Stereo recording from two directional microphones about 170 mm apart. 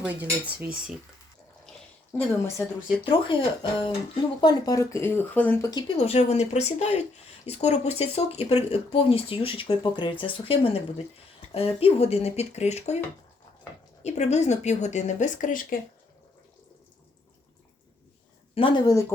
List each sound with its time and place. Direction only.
0.0 s cutlery: 10° right (ahead or behind)
2.1 s speech: 15° left (ahead or behind)
3.0 s speech: 30° left (ahead or behind); by 5.7 s 10° left (ahead or behind)
5.7 s speech: 35° left (ahead or behind)
14.0 s speech: 40° left (ahead or behind)
18.5 s speech: 30° left (ahead or behind)